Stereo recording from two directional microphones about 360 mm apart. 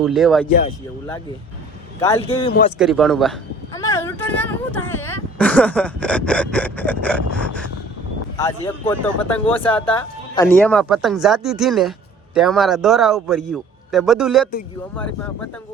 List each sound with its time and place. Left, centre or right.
0.0 s speech: centre
2.0 s speech: centre
2.5 s speech: left
2.7 s speech: centre
3.8 s a sound: centre
4.9 s speech: centre